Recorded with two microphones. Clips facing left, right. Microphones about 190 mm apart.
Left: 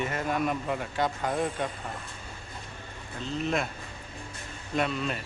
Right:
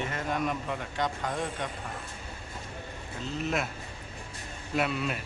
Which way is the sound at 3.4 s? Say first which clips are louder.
Left 2 dB; 5° right (ahead or behind).